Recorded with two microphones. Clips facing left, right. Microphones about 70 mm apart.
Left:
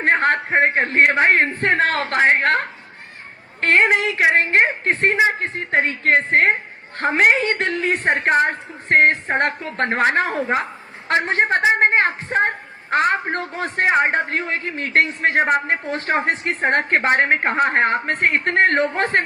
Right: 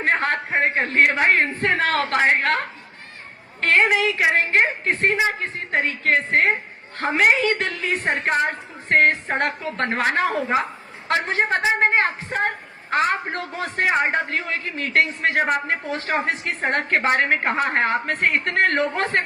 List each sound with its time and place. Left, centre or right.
0.0 s a man's voice: left
9.0 s a man's voice: left